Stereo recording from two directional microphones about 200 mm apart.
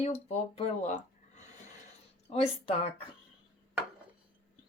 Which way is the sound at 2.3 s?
30° left (ahead or behind).